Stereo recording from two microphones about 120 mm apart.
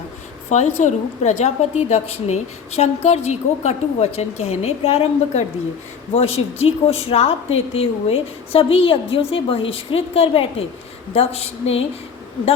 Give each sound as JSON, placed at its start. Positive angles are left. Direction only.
{"t": 0.8, "sound": "a woman's voice", "side_deg": 85}